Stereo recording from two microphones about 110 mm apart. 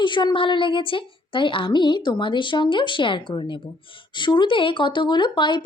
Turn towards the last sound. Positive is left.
turn(degrees=45)  # may be behind; listen again after turning